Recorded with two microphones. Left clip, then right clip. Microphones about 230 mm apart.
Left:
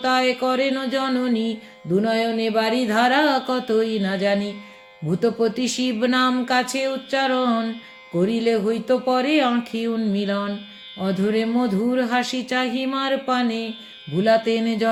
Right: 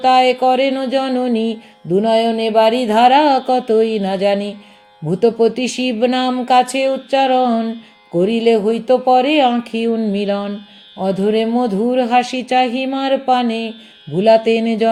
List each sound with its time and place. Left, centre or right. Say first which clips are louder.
0.0 s speech: right 8 dB; right